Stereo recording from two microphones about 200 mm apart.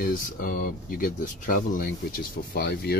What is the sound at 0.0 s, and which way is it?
Speech, 45° left (ahead or behind).